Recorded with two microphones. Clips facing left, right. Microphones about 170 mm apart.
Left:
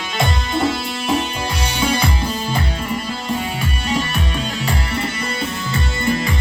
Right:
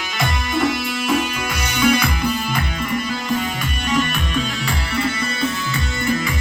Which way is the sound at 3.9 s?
35° left (ahead or behind).